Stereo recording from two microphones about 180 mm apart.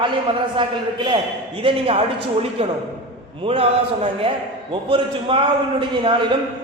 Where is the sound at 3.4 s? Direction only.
35° right (ahead or behind).